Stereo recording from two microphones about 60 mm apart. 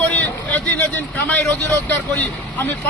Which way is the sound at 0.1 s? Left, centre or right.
Left.